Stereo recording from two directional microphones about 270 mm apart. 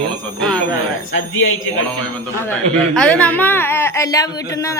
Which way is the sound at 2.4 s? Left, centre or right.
Centre.